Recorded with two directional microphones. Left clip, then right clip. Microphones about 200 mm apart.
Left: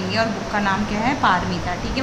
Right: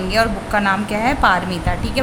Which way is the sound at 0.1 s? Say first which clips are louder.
Right 5 dB; 45° right (ahead or behind).